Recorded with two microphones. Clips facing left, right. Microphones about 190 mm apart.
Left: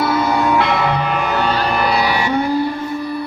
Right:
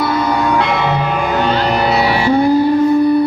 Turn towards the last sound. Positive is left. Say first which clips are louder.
# right 5 dB
turn(degrees=-30)  # may be behind; listen again after turning